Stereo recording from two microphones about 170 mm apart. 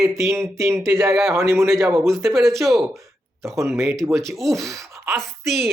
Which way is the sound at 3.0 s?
15° right (ahead or behind).